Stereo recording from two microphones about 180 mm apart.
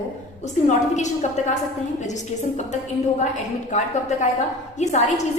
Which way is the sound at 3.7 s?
40° left (ahead or behind).